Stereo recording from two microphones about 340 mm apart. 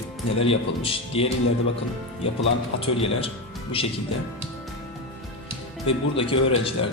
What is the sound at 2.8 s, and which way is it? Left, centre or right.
Speech, centre.